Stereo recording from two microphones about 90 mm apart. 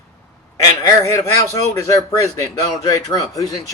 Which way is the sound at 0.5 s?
40° left (ahead or behind).